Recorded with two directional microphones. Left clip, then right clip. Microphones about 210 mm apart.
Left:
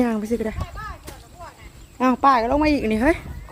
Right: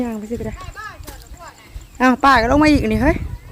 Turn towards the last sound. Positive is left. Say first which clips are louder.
# right 5 dB
turn(degrees=-15)  # may be behind; listen again after turning